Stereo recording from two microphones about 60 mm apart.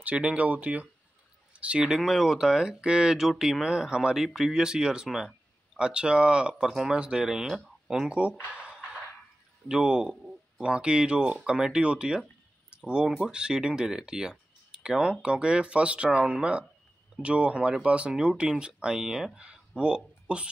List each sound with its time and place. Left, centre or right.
0.0 s speech: right
2.0 s speech: centre
8.5 s a sound: centre
9.7 s speech: centre
12.6 s a sound: centre
13.3 s speech: centre